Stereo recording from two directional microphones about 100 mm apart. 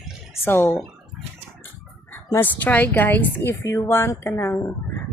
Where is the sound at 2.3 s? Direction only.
15° left (ahead or behind).